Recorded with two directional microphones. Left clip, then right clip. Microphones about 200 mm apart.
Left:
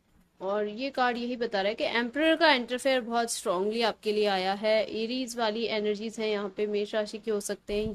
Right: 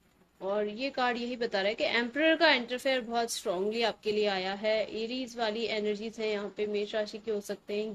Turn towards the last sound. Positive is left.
turn(degrees=25)  # may be behind; listen again after turning